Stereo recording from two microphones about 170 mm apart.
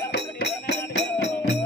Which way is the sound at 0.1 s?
90° left.